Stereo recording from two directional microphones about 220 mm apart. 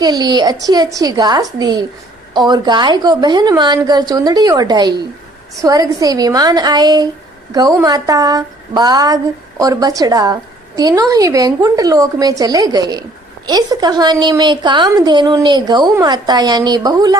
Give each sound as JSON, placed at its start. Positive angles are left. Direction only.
{"t": 0.0, "sound": "a woman's voice", "side_deg": -20}